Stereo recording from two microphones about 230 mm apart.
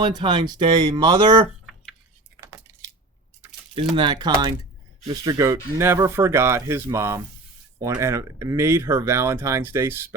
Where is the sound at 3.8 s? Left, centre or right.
Right.